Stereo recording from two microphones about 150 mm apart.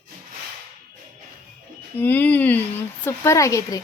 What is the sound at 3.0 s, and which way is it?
Speech, 20° left (ahead or behind).